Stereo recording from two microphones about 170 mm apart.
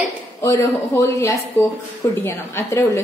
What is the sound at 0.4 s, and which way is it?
A woman's voice, 20° left (ahead or behind).